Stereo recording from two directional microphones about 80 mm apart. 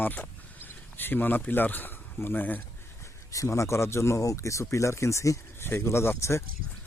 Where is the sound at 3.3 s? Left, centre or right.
Left.